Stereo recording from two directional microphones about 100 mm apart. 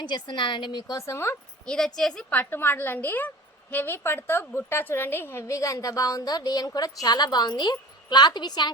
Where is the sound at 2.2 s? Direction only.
20° left (ahead or behind).